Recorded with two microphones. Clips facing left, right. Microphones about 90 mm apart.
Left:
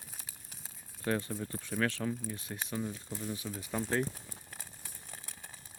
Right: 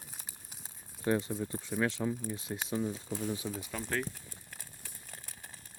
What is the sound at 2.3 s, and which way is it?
Speech, 20° right (ahead or behind).